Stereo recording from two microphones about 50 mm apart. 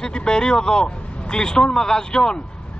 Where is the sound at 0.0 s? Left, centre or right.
Centre.